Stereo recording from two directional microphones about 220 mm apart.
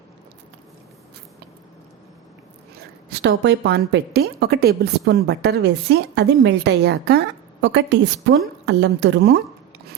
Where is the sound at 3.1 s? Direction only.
50° right (ahead or behind).